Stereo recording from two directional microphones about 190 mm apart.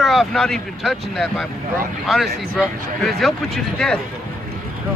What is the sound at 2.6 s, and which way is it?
Speech, centre (ahead or behind).